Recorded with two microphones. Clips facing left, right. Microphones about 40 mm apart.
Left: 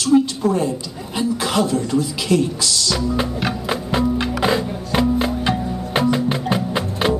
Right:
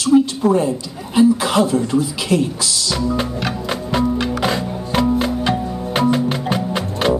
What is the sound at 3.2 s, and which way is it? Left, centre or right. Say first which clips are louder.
Music: even; centre.